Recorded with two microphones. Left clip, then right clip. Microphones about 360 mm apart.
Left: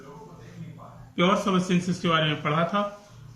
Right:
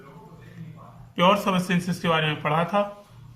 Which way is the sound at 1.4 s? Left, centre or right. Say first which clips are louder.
Right 1 dB; centre.